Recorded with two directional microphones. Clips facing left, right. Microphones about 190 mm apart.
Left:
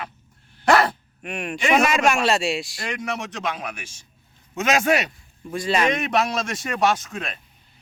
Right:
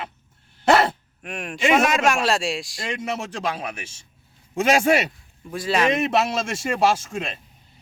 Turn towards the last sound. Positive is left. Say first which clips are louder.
# right 1 dB
turn(degrees=-25)  # may be behind; listen again after turning